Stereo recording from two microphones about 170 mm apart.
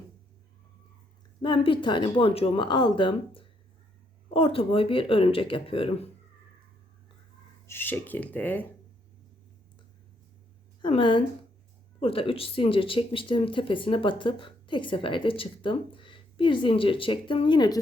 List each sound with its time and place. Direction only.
1.4 s speech: 30° left (ahead or behind)
7.7 s speech: 10° left (ahead or behind)
10.8 s speech: 30° left (ahead or behind)